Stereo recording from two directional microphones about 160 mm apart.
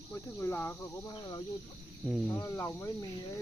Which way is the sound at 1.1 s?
25° left (ahead or behind).